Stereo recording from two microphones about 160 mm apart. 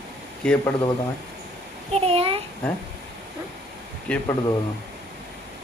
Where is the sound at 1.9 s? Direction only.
40° right (ahead or behind).